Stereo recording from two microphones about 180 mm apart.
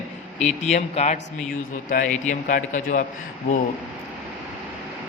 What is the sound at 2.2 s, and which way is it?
Speech, 45° left (ahead or behind).